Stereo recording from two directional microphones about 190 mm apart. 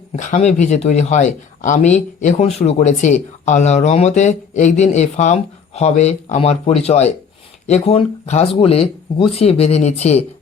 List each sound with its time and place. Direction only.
0.2 s speech: 40° left (ahead or behind)